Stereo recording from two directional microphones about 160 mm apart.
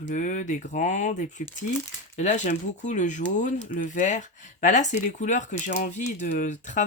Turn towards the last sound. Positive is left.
turn(degrees=50)  # may be behind; listen again after turning